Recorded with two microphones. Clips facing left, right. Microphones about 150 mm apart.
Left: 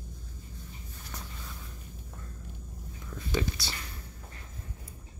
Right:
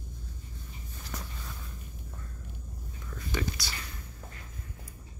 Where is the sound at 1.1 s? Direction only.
90° right.